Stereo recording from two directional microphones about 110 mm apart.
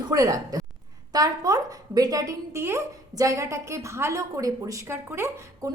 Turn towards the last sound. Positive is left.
turn(degrees=-20)  # may be behind; listen again after turning